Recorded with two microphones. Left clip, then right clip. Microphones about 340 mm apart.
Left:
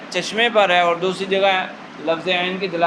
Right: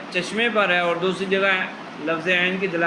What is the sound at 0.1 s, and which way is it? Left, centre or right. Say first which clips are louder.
A man's voice: left 4 dB; centre.